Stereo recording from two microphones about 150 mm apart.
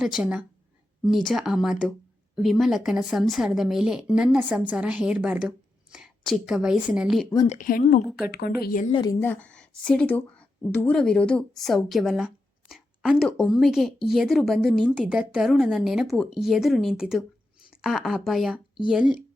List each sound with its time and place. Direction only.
0.0 s a woman's voice: 5° right (ahead or behind)
7.4 s speech: 50° left (ahead or behind)
7.7 s a woman's voice: 75° left (ahead or behind)
8.3 s speech: 90° left; by 8.9 s 75° left (ahead or behind)
8.9 s a woman's voice: 30° left (ahead or behind)
9.2 s speech: 10° left (ahead or behind)
17.7 s a sound: centre (ahead or behind)
18.3 s speech: centre (ahead or behind)